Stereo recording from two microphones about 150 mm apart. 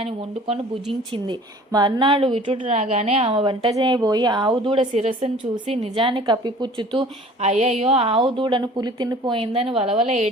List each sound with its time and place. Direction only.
0.0 s a woman's voice: 40° right (ahead or behind)
1.3 s a woman's voice: 25° right (ahead or behind)
7.4 s a woman's voice: 50° right (ahead or behind)